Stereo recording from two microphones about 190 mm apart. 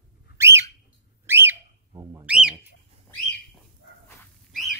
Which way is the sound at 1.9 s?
20° right (ahead or behind).